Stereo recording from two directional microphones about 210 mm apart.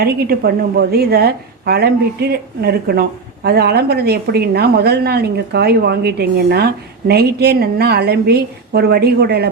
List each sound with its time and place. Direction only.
0.0 s a woman's voice: 50° right (ahead or behind)